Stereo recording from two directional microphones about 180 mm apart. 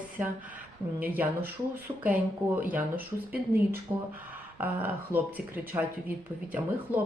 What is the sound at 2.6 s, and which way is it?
Speech, 10° right (ahead or behind).